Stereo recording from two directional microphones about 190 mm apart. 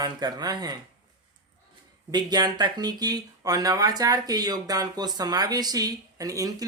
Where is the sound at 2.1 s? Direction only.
20° right (ahead or behind).